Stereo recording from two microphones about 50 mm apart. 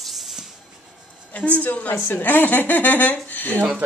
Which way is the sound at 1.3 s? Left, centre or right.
Left.